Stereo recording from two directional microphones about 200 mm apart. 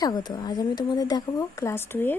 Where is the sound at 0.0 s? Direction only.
20° left (ahead or behind).